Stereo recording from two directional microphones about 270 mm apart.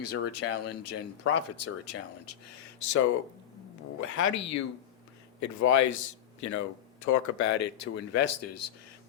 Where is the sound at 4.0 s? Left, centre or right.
Left.